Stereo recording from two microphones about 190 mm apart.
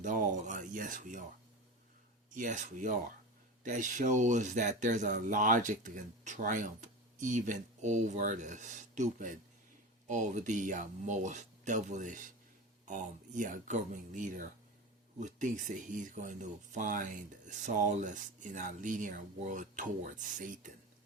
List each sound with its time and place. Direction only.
0.0 s speech: 40° right (ahead or behind)
2.3 s speech: 40° right (ahead or behind)